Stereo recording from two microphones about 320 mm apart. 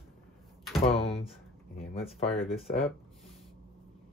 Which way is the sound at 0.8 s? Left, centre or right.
Centre.